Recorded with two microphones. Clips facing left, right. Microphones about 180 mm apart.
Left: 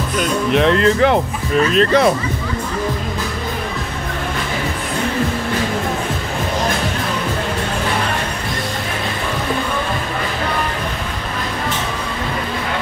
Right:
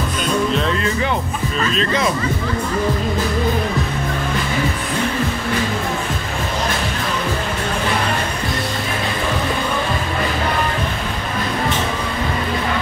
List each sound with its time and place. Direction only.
0.5 s speech: 70° left (ahead or behind)
1.7 s speech: 60° left (ahead or behind)